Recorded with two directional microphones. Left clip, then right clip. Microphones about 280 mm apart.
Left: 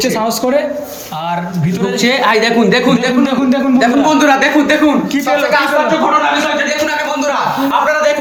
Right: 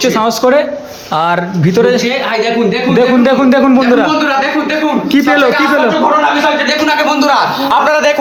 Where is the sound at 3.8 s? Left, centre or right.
Centre.